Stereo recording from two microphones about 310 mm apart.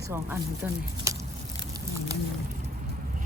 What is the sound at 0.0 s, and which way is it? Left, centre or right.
Speech, centre.